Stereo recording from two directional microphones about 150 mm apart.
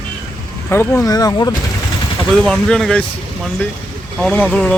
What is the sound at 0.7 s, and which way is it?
Speech, 15° left (ahead or behind).